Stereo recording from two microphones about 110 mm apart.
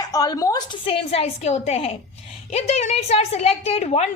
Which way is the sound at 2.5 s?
85° left.